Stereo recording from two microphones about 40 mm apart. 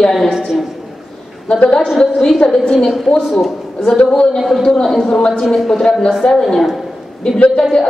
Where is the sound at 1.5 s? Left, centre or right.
Left.